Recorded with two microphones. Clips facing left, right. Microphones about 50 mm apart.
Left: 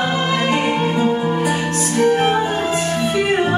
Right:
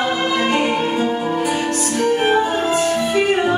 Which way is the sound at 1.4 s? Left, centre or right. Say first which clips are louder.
Even; left.